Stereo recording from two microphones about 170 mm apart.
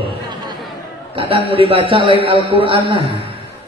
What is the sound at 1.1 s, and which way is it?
A man's voice, 30° right (ahead or behind).